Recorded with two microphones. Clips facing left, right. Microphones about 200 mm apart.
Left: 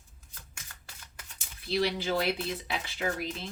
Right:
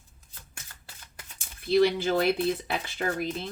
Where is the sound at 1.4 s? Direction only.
50° right (ahead or behind).